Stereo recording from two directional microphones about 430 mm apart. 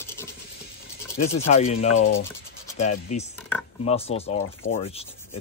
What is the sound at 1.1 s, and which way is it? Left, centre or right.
Speech, centre.